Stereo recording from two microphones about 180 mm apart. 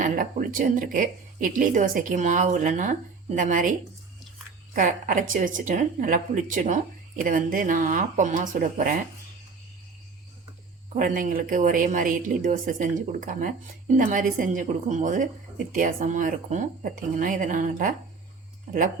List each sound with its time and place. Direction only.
0.0 s a woman's voice: 50° right (ahead or behind)
10.9 s a woman's voice: 50° right (ahead or behind)